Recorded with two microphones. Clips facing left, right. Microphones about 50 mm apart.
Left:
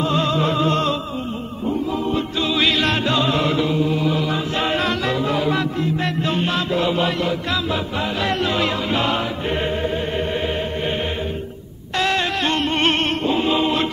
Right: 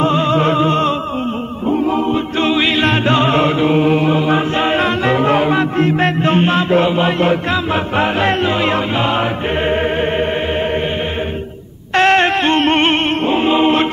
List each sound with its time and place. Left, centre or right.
0.1 s music: right
2.5 s music: right
3.7 s chant: right
4.2 s a capella: right
5.8 s music: right
9.7 s music: right
11.9 s music: right
13.2 s chant: right